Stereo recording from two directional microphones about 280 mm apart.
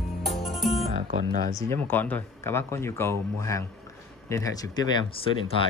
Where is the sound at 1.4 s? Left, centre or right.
Centre.